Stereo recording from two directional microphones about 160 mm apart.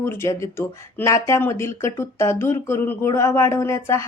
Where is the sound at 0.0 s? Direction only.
15° left (ahead or behind).